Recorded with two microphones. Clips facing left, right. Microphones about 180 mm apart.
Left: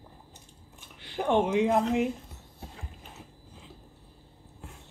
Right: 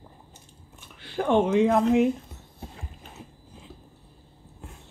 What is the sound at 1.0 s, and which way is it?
Speech, 15° left (ahead or behind).